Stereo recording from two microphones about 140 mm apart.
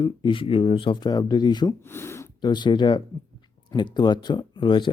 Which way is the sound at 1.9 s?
20° left (ahead or behind).